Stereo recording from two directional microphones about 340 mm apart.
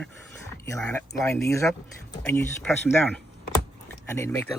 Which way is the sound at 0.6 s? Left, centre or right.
Centre.